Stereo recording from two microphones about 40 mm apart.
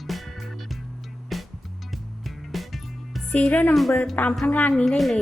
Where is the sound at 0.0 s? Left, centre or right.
Centre.